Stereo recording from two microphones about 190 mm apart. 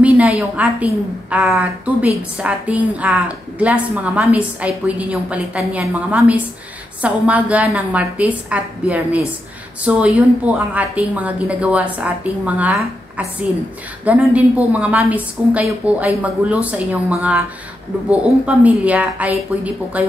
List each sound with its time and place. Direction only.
0.0 s a woman's voice: 10° right (ahead or behind)
14.0 s a woman's voice: 10° right (ahead or behind)